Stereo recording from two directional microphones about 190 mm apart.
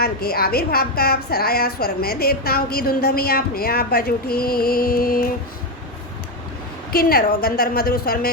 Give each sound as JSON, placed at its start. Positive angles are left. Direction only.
{"t": 0.0, "sound": "a woman's voice", "side_deg": 55}
{"t": 6.9, "sound": "a woman's voice", "side_deg": 55}